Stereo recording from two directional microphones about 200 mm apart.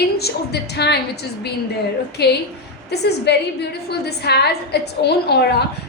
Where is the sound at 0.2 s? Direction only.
55° left (ahead or behind).